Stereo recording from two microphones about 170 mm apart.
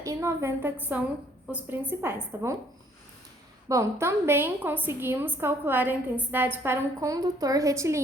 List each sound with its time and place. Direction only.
0.0 s a woman's voice: 15° right (ahead or behind)
3.7 s a woman's voice: 15° right (ahead or behind)